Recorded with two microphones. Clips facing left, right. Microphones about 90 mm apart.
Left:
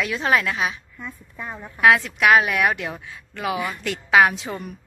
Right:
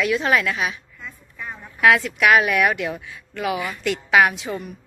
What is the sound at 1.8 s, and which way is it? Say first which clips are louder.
A woman's voice: even; 30° left (ahead or behind).